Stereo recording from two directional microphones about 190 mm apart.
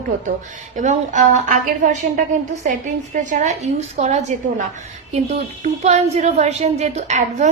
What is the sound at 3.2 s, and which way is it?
A woman's voice, 40° right (ahead or behind).